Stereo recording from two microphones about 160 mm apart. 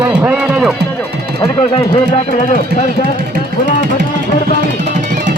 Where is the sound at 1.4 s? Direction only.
30° left (ahead or behind).